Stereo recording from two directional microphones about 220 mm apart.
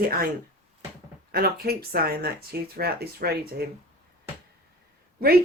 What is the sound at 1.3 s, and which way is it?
Speech, 45° right (ahead or behind).